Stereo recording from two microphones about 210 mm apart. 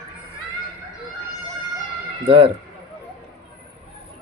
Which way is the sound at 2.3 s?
25° right (ahead or behind).